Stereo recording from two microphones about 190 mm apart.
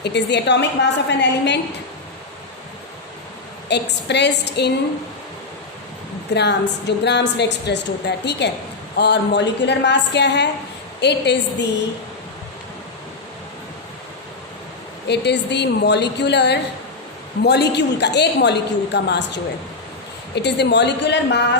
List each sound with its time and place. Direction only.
0.0 s a woman's voice: 65° left (ahead or behind)
3.7 s a woman's voice: 65° left (ahead or behind)
6.3 s a woman's voice: 65° left (ahead or behind)
15.0 s a woman's voice: 65° left (ahead or behind)